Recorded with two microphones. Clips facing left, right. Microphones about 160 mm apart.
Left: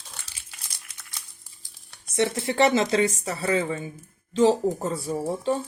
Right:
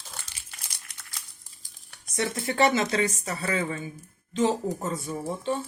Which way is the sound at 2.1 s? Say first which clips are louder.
Left 4 dB; 25° left (ahead or behind).